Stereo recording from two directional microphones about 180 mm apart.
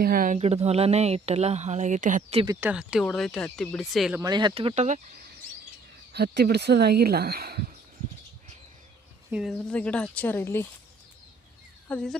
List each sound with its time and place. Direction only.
0.0 s speech: 50° right (ahead or behind)
0.3 s speech: 35° right (ahead or behind)
2.6 s speech: 5° right (ahead or behind)
4.2 s speech: 25° right (ahead or behind)
6.1 s speech: 60° right (ahead or behind)
9.3 s speech: centre (ahead or behind)
11.9 s speech: 5° left (ahead or behind)